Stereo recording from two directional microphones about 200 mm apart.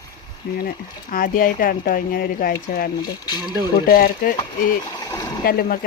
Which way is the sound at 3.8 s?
50° left (ahead or behind).